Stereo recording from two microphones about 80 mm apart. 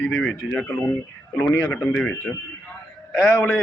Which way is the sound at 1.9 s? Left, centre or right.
Centre.